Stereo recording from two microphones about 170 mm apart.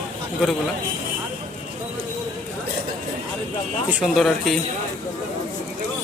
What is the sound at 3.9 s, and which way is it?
Speech, 10° right (ahead or behind).